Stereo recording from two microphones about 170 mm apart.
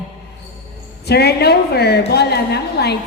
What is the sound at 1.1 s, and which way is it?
A woman's voice, 70° left (ahead or behind).